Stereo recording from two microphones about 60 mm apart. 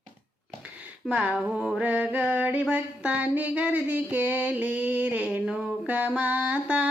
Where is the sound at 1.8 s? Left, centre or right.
Right.